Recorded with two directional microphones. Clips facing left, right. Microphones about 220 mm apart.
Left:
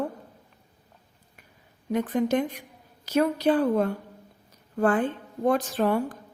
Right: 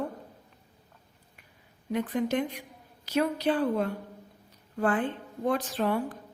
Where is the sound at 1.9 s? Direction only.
45° left (ahead or behind).